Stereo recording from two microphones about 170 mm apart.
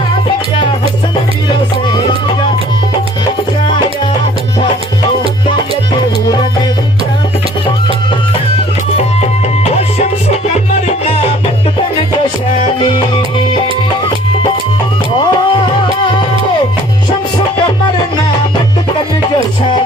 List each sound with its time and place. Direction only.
9.0 s music: 40° left (ahead or behind)
15.2 s music: 30° left (ahead or behind)